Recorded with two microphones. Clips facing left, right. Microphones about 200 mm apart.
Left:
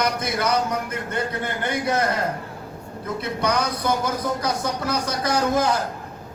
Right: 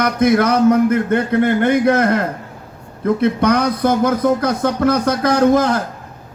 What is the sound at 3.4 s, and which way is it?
A man's voice, 55° right (ahead or behind).